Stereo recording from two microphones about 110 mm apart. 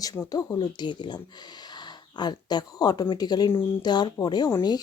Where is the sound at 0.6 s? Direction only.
45° left (ahead or behind).